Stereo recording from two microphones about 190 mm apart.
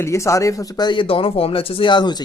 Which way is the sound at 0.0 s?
15° left (ahead or behind).